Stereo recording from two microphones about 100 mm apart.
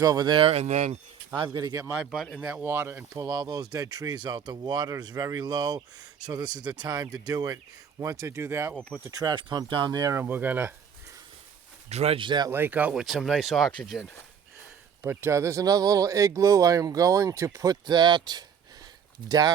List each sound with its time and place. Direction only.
0.0 s speech: 40° right (ahead or behind)
0.3 s speech: 80° right
1.6 s speech: 50° right (ahead or behind)
2.0 s speech: centre (ahead or behind)
2.6 s speech: 25° right (ahead or behind)
3.2 s speech: 40° right (ahead or behind)
9.0 s speech: 35° right (ahead or behind)
9.3 s speech: 50° right (ahead or behind)
10.2 s speech: 20° right (ahead or behind)
11.9 s speech: 90° right
12.2 s speech: 50° right (ahead or behind)
12.5 s speech: 20° right (ahead or behind)
12.9 s speech: 5° right (ahead or behind)
15.0 s speech: 25° right (ahead or behind); by 19.5 s 40° right (ahead or behind)